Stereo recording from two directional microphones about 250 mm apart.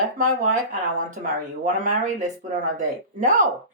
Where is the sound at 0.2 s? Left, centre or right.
Right.